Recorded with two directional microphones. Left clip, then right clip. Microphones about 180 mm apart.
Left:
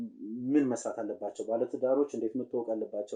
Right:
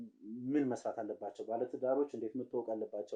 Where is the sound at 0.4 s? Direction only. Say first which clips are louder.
Left 6 dB; 15° right (ahead or behind).